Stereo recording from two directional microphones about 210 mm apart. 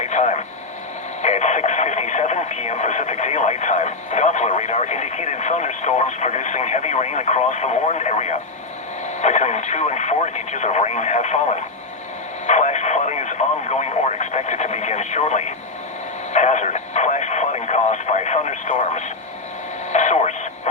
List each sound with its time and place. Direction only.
0.0 s radio: 35° left (ahead or behind)
9.2 s speech: 35° left (ahead or behind)
12.5 s radio: 35° left (ahead or behind)